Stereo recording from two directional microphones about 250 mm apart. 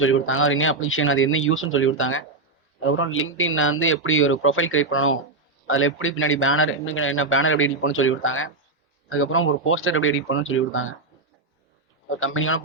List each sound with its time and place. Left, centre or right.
0.0 s a man's voice: left
12.0 s a man's voice: left